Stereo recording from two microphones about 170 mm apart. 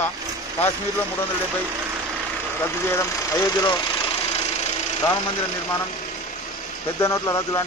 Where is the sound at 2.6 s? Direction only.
15° left (ahead or behind).